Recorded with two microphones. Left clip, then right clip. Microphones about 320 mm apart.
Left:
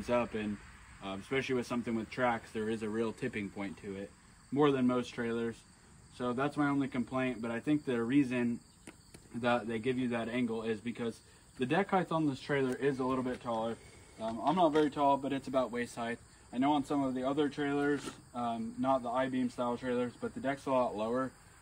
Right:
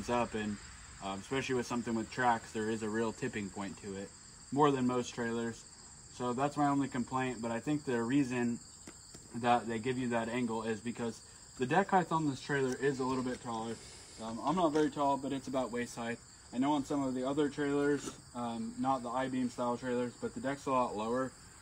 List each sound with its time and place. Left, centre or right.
0.0 s speech: centre
9.7 s speech: centre